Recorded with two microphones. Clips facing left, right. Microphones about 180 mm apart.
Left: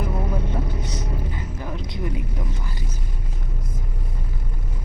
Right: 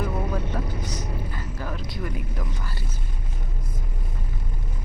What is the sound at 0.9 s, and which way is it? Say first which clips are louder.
Vehicle: left 2 dB; 20° left (ahead or behind).